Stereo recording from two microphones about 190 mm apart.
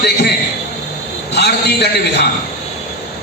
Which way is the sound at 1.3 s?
60° left (ahead or behind).